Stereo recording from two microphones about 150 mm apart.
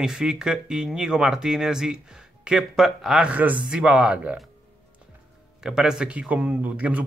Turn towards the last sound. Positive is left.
turn(degrees=-10)  # may be behind; listen again after turning